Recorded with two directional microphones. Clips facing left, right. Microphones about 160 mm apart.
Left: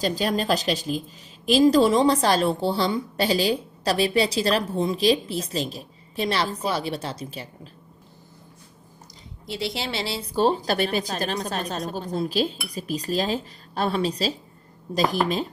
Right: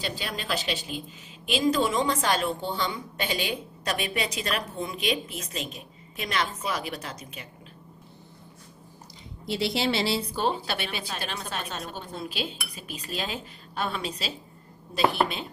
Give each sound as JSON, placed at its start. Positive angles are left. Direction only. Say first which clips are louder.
{"t": 0.0, "sound": "a woman's voice", "louder": "left 10 dB", "side_deg": 40}
{"t": 9.6, "sound": "a woman's voice", "louder": "right 3 dB", "side_deg": 35}